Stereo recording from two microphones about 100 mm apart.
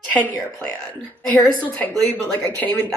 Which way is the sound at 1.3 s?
15° left (ahead or behind).